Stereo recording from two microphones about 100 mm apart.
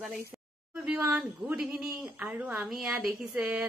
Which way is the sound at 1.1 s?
10° right (ahead or behind).